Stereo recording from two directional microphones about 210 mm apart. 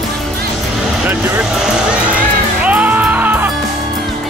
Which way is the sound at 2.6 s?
5° right (ahead or behind).